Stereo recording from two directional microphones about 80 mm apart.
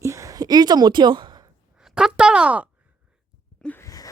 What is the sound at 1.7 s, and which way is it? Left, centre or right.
Speech, centre.